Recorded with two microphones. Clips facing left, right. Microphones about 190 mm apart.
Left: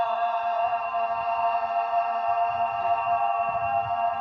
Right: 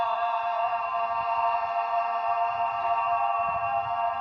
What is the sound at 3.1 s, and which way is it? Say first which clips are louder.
Music: left 2 dB; 35° left (ahead or behind).